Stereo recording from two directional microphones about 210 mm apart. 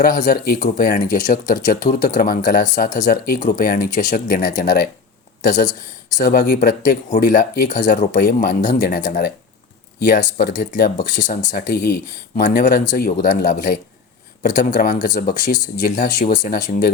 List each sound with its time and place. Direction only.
0.0 s speech: 45° left (ahead or behind)